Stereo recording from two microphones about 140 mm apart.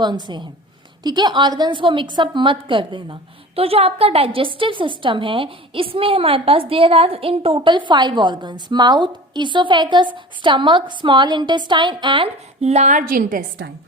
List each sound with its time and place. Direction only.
0.0 s a woman's voice: 30° right (ahead or behind); by 13.4 s 75° right (ahead or behind)